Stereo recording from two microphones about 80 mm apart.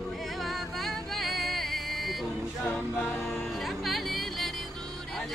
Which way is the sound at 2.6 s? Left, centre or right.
Left.